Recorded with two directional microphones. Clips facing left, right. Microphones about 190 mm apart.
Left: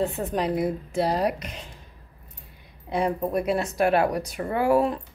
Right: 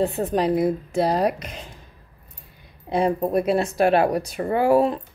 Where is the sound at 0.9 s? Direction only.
40° right (ahead or behind).